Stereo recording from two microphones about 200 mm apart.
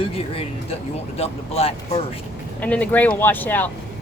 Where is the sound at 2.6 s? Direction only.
5° left (ahead or behind).